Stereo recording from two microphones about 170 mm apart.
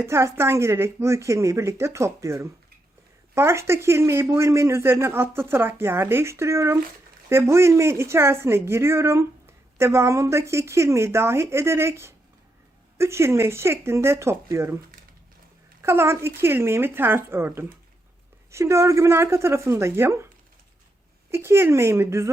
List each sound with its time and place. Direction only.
0.0 s speech: 15° right (ahead or behind)
15.8 s speech: 15° right (ahead or behind)
21.2 s speech: 15° right (ahead or behind)